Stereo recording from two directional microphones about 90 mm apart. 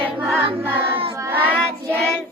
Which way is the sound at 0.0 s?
20° right (ahead or behind).